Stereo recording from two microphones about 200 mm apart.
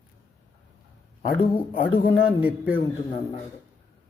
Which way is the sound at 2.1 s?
10° right (ahead or behind).